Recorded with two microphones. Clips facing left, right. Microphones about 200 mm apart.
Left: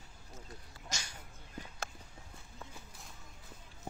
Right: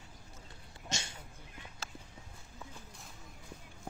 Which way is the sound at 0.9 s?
25° right (ahead or behind).